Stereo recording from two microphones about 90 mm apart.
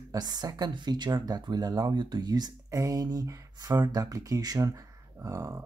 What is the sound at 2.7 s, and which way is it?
Speech, 40° right (ahead or behind).